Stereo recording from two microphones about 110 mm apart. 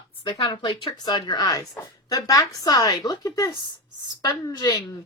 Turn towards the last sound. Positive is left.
turn(degrees=35)  # may be behind; listen again after turning